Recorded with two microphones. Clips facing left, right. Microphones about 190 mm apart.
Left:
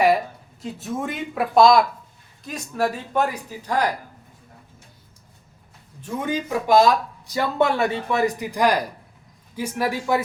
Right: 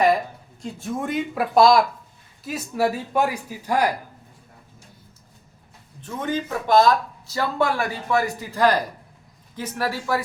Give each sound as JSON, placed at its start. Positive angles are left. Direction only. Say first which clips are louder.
{"t": 0.6, "sound": "speech", "louder": "even", "side_deg": 0}
{"t": 6.0, "sound": "speech", "louder": "left 1 dB", "side_deg": 10}